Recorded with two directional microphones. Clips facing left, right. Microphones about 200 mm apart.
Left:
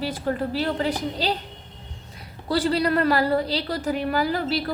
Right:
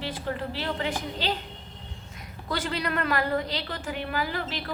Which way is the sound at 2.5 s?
35° left (ahead or behind).